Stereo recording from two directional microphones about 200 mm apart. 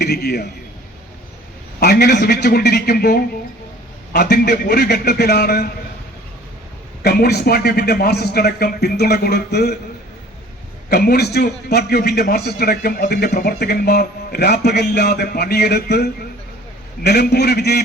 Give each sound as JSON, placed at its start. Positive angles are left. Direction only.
{"t": 0.0, "sound": "a man's voice", "side_deg": 55}
{"t": 1.8, "sound": "a man's voice", "side_deg": 55}
{"t": 7.0, "sound": "a man's voice", "side_deg": 50}
{"t": 10.8, "sound": "a man's voice", "side_deg": 50}